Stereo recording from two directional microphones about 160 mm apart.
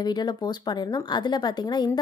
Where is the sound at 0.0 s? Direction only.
25° left (ahead or behind).